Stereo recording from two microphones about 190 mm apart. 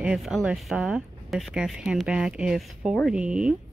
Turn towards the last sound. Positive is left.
turn(degrees=-5)  # may be behind; listen again after turning